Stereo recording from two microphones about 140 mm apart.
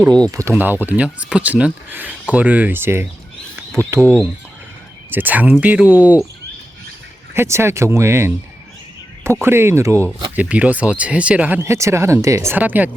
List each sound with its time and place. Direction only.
0.3 s speech: 20° right (ahead or behind)
3.5 s a sound: 20° right (ahead or behind)
5.1 s speech: 10° right (ahead or behind)
7.3 s speech: 20° right (ahead or behind)